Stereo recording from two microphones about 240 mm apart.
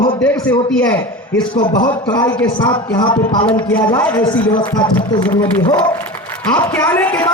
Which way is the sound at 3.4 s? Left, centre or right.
Centre.